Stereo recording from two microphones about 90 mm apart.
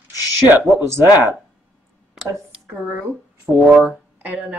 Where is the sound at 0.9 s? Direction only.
30° right (ahead or behind).